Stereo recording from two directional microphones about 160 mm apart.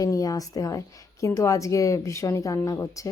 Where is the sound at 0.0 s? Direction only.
20° left (ahead or behind).